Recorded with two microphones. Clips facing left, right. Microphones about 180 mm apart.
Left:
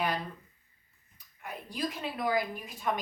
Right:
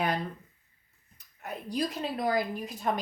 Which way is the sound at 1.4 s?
40° right (ahead or behind).